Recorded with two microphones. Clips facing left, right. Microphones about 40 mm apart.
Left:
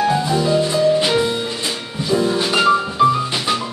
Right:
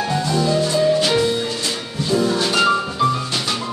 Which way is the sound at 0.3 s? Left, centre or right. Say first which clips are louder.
Left 1 dB; centre.